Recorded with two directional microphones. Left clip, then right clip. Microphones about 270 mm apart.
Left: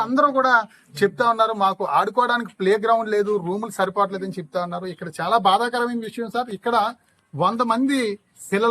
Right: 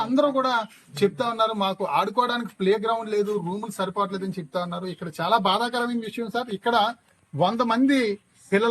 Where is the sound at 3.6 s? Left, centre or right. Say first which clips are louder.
Left 5 dB; centre.